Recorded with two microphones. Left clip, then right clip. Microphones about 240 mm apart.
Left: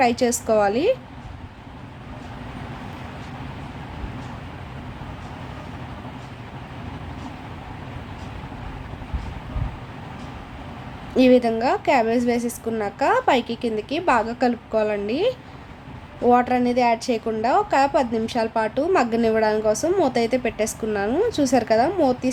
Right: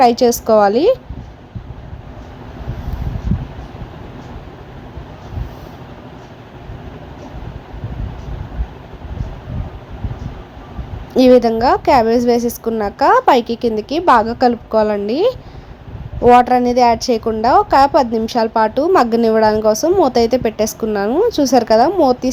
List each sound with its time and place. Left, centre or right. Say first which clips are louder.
0.0 s a woman's voice: right 8 dB; centre
11.1 s a woman's voice: right 7 dB; centre